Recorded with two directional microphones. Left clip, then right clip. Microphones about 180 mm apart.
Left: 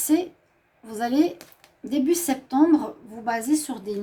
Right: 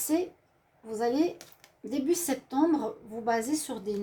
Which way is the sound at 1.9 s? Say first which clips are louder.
Left 6 dB; 45° left (ahead or behind).